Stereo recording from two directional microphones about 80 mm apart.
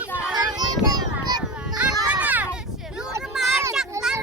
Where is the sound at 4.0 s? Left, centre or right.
Right.